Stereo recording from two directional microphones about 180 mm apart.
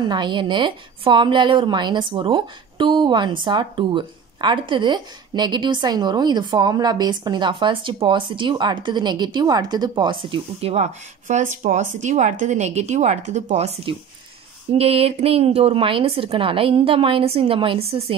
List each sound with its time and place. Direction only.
0.0 s a woman's voice: 25° right (ahead or behind)